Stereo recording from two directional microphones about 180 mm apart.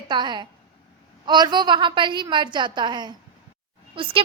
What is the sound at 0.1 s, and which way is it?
A woman's voice, 25° right (ahead or behind).